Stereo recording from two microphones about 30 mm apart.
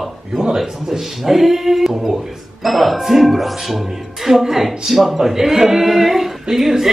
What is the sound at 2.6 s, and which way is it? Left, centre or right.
Speech, centre.